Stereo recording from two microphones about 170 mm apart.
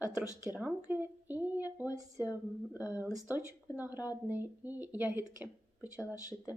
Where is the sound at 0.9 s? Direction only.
10° right (ahead or behind).